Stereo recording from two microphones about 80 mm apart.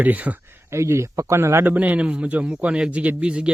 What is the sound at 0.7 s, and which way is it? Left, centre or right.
Speech, right.